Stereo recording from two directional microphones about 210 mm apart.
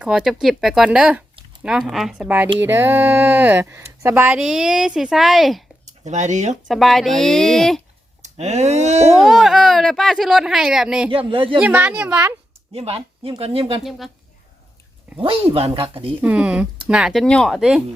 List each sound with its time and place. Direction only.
0.0 s speech: 5° right (ahead or behind)
5.8 s speech: 35° right (ahead or behind)
6.7 s speech: centre (ahead or behind)
8.2 s speech: 30° right (ahead or behind)
9.1 s speech: centre (ahead or behind)
11.1 s speech: 25° right (ahead or behind)
11.6 s speech: 10° right (ahead or behind)
12.7 s speech: 30° right (ahead or behind)
15.2 s speech: 25° right (ahead or behind)
16.2 s speech: 5° right (ahead or behind)